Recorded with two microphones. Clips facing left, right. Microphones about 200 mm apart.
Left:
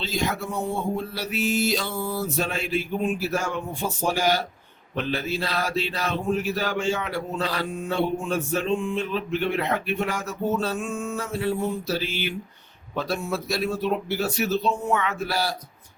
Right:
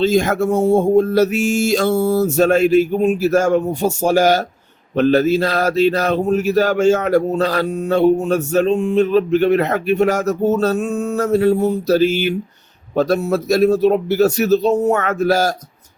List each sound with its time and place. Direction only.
0.0 s speech: 50° right (ahead or behind)
10.0 s a sound: 40° right (ahead or behind)
13.0 s speech: 40° right (ahead or behind)